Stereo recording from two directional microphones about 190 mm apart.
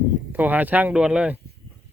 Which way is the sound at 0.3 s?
10° right (ahead or behind).